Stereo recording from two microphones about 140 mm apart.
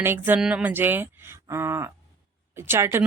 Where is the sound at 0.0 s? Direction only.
15° right (ahead or behind).